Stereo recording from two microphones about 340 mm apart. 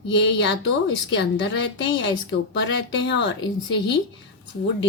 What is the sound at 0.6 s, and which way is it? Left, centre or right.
Speech, left.